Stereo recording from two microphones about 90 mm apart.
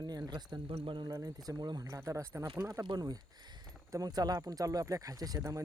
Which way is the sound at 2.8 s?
50° right (ahead or behind).